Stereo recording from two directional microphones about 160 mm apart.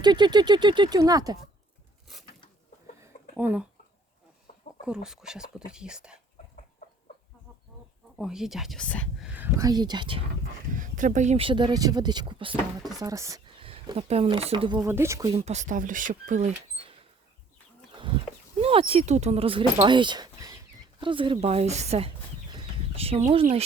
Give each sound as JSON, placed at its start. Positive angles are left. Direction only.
{"t": 0.0, "sound": "speech", "side_deg": -25}
{"t": 3.0, "sound": "a sound", "side_deg": -10}
{"t": 5.0, "sound": "speech", "side_deg": -5}
{"t": 8.1, "sound": "speech", "side_deg": -5}
{"t": 9.2, "sound": "a sound", "side_deg": -10}
{"t": 9.6, "sound": "speech", "side_deg": -25}
{"t": 10.7, "sound": "speech", "side_deg": -55}
{"t": 13.0, "sound": "speech", "side_deg": -20}
{"t": 13.6, "sound": "speech", "side_deg": -35}
{"t": 14.8, "sound": "speech", "side_deg": -15}
{"t": 15.3, "sound": "speech", "side_deg": -40}
{"t": 17.9, "sound": "chicken", "side_deg": -30}
{"t": 18.6, "sound": "speech", "side_deg": -35}